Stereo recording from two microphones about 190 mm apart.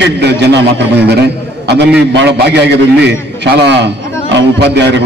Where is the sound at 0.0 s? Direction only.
65° right (ahead or behind).